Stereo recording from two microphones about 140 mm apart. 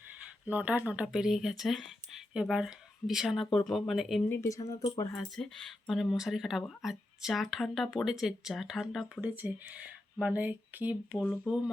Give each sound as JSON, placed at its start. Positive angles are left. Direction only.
{"t": 0.4, "sound": "speech", "side_deg": -10}
{"t": 4.2, "sound": "speech", "side_deg": 15}
{"t": 5.1, "sound": "speech", "side_deg": 5}
{"t": 9.2, "sound": "speech", "side_deg": -10}